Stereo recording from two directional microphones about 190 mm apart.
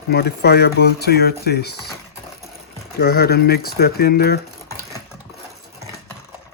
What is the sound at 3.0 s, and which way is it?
Speech, 55° left (ahead or behind).